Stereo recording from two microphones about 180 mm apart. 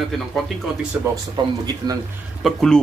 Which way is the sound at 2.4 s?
Centre (ahead or behind).